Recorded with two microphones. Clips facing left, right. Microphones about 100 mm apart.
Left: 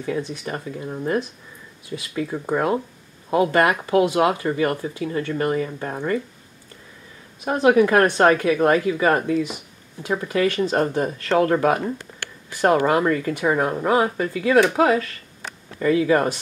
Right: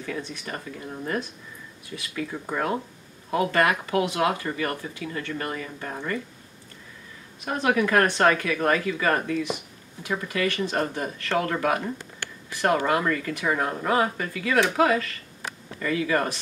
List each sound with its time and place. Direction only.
0.0 s speech: 25° left (ahead or behind)
2.1 s speech: 25° left (ahead or behind)
7.4 s speech: 30° left (ahead or behind)